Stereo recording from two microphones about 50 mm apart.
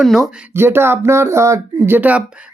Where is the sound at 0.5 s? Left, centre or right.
Right.